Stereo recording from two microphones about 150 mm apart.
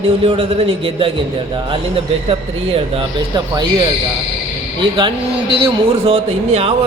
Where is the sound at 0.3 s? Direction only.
40° right (ahead or behind).